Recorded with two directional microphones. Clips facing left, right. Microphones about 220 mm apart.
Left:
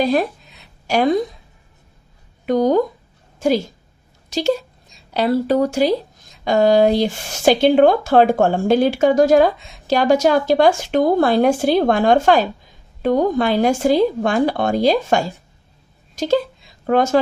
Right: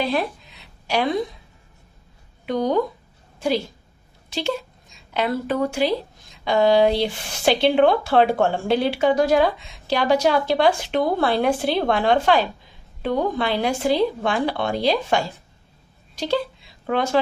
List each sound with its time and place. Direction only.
0.0 s speech: 45° left (ahead or behind)
2.5 s speech: 45° left (ahead or behind)